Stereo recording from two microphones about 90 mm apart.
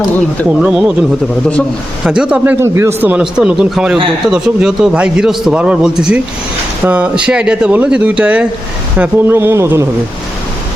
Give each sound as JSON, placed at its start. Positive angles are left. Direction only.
{"t": 0.6, "sound": "speech", "side_deg": -10}
{"t": 2.0, "sound": "speech", "side_deg": -10}
{"t": 2.4, "sound": "a man's voice", "side_deg": -25}
{"t": 3.1, "sound": "a man's voice", "side_deg": -10}